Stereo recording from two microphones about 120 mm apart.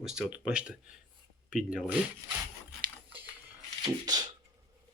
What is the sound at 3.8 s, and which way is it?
Speech, 35° right (ahead or behind).